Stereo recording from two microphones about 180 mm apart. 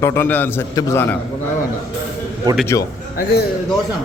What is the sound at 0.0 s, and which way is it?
A man's voice, 15° left (ahead or behind).